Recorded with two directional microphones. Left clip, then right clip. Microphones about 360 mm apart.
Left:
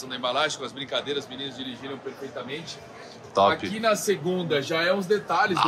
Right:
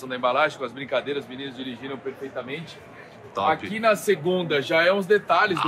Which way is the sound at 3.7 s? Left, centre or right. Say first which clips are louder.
Right 3 dB; centre.